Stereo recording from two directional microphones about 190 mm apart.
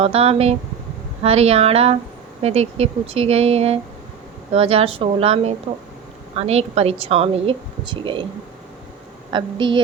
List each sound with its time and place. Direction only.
0.0 s a woman's voice: 30° right (ahead or behind)
9.3 s a woman's voice: 25° right (ahead or behind)